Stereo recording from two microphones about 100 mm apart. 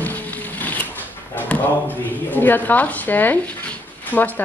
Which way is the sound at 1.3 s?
20° left (ahead or behind).